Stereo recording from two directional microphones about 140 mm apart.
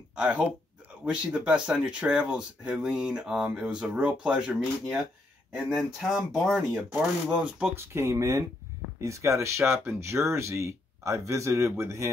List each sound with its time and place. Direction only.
0.2 s speech: 10° right (ahead or behind)
7.7 s speech: 20° right (ahead or behind)